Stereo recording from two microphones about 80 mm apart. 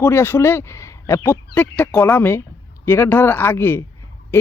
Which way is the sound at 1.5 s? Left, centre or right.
Left.